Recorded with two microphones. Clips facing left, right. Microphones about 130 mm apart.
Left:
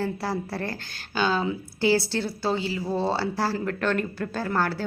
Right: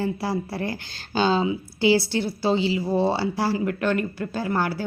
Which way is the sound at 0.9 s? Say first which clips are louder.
Right 4 dB; 30° right (ahead or behind).